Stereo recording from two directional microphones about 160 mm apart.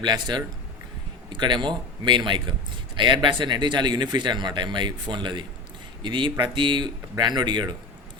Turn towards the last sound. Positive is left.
turn(degrees=-30)  # may be behind; listen again after turning